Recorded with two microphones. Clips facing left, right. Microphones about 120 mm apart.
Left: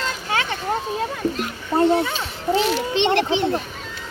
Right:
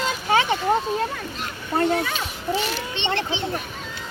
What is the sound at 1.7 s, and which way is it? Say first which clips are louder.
Speech: left 4 dB; 25° left (ahead or behind).